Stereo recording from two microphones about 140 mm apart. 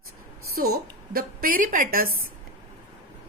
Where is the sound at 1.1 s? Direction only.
85° right.